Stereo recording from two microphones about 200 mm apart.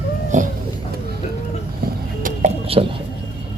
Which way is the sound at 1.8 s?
45° right (ahead or behind).